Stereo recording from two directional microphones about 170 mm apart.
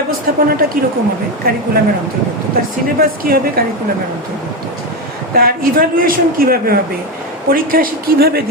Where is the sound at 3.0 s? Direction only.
60° right (ahead or behind).